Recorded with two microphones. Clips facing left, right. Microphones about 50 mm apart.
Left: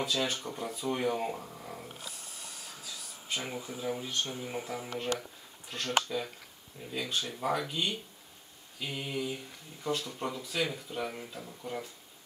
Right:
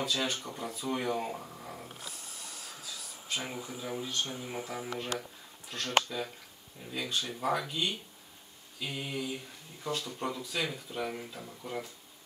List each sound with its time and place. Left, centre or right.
0.0 s speech: centre
3.3 s a sound: centre
3.6 s speech: centre